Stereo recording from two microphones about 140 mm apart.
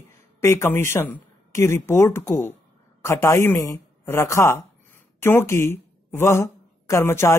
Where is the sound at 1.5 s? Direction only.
20° left (ahead or behind).